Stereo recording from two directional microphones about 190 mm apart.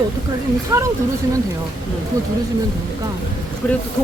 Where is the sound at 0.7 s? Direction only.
15° right (ahead or behind).